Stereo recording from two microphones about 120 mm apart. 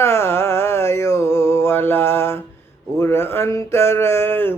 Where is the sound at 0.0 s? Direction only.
20° left (ahead or behind).